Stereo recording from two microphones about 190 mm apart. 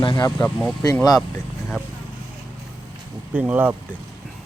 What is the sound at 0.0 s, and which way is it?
Speech, 20° left (ahead or behind).